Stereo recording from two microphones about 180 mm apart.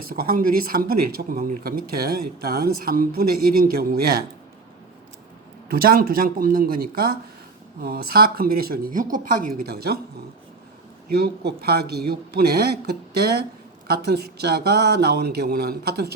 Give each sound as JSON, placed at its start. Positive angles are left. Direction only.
{"t": 0.1, "sound": "speech", "side_deg": -55}
{"t": 5.7, "sound": "speech", "side_deg": -55}
{"t": 11.2, "sound": "speech", "side_deg": -60}
{"t": 14.0, "sound": "speech", "side_deg": -65}